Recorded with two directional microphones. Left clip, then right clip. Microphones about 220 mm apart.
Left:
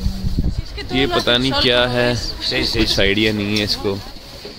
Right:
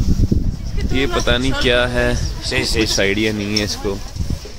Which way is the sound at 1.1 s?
Centre (ahead or behind).